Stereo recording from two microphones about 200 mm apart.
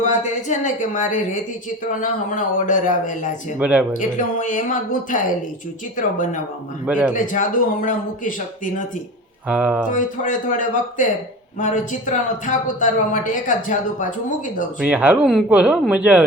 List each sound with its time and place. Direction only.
0.0 s speech: 35° left (ahead or behind)
3.6 s speech: 5° right (ahead or behind)
3.9 s speech: 40° left (ahead or behind)
9.5 s speech: 5° right (ahead or behind)
9.8 s speech: 40° left (ahead or behind)
14.8 s speech: 5° right (ahead or behind)